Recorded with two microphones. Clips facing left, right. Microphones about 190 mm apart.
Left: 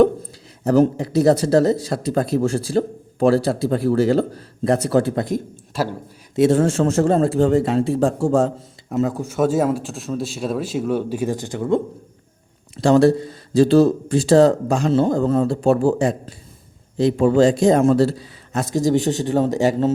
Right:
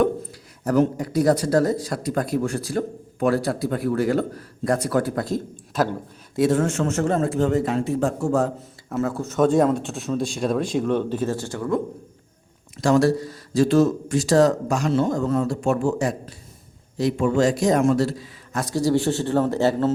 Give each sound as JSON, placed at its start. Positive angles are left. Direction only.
{"t": 0.6, "sound": "speech", "side_deg": 30}